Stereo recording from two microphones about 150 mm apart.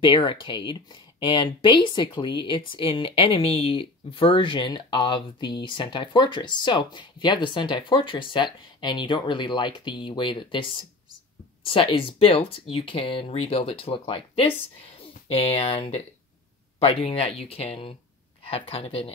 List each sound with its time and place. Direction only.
0.0 s speech: 35° left (ahead or behind)